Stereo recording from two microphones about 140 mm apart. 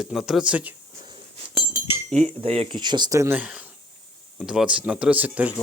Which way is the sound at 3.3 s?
10° right (ahead or behind).